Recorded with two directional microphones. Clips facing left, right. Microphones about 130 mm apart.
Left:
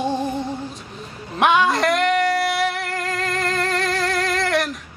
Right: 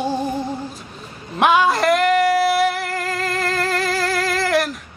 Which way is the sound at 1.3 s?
Centre (ahead or behind).